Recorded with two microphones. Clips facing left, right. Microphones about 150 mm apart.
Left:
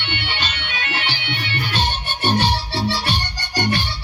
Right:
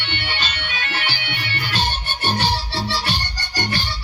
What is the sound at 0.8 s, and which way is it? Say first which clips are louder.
Bagpipes: left 2 dB; 20° left (ahead or behind).